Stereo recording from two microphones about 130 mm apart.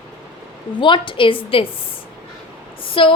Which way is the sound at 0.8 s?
40° left (ahead or behind).